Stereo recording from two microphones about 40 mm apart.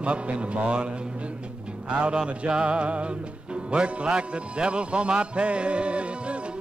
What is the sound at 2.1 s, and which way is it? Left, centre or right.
Music, right.